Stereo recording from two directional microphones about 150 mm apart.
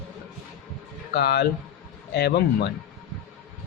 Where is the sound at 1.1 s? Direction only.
90° left.